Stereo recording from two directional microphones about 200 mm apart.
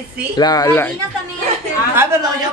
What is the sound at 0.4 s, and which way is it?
Speech, 20° left (ahead or behind).